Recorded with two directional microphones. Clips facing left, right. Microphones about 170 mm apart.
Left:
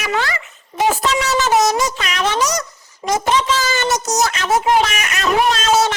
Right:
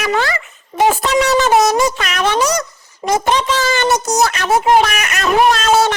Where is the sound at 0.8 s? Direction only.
55° right (ahead or behind).